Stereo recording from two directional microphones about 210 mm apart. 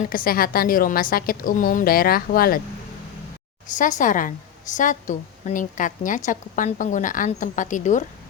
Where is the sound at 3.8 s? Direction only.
40° left (ahead or behind).